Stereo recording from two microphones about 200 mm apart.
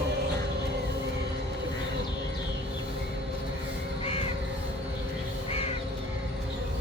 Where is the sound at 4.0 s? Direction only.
30° left (ahead or behind).